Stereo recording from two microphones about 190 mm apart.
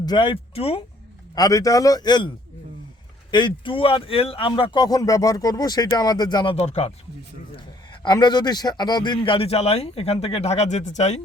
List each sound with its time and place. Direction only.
0.0 s speech: 25° left (ahead or behind)
1.4 s speech: 20° left (ahead or behind)
3.3 s speech: 25° left (ahead or behind)
8.0 s a man's voice: 20° left (ahead or behind); by 11.2 s 35° left (ahead or behind)